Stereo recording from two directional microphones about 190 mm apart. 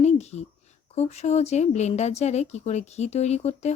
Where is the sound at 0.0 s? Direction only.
35° left (ahead or behind).